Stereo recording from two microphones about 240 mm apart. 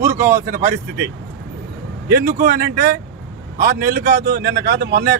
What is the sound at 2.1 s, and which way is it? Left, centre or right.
Speech, right.